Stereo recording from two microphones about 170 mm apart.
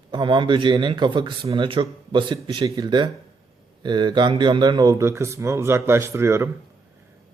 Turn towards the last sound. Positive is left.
turn(degrees=-15)  # may be behind; listen again after turning